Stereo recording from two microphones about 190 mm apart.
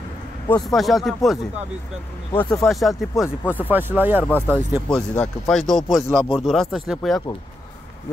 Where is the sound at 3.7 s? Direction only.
10° right (ahead or behind).